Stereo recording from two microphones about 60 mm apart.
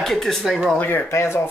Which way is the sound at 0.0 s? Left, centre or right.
Centre.